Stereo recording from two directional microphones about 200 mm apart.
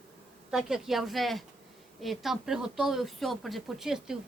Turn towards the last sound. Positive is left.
turn(degrees=0)  # may be behind; listen again after turning